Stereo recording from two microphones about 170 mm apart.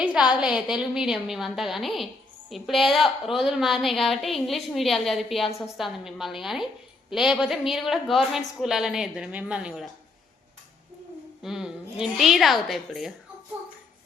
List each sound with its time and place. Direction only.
0.0 s a woman's voice: 5° right (ahead or behind)
11.4 s a woman's voice: 5° right (ahead or behind)